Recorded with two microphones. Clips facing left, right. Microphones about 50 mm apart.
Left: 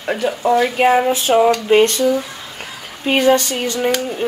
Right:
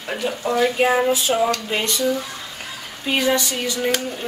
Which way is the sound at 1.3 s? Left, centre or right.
Left.